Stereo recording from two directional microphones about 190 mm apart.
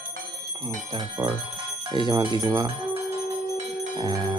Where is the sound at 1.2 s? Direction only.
20° right (ahead or behind).